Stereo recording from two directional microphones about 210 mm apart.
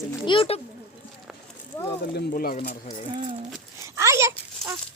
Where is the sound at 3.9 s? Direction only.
15° right (ahead or behind).